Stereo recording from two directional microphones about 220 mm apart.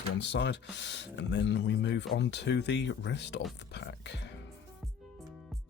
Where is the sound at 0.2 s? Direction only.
55° left (ahead or behind).